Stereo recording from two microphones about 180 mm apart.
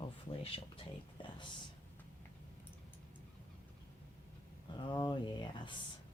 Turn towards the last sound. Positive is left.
turn(degrees=25)  # may be behind; listen again after turning